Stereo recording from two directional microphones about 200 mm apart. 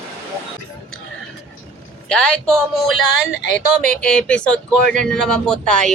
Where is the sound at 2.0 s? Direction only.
5° left (ahead or behind).